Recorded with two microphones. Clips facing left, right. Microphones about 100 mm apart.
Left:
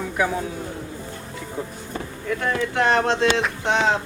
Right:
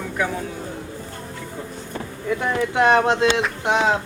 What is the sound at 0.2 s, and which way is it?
Speech, 10° left (ahead or behind).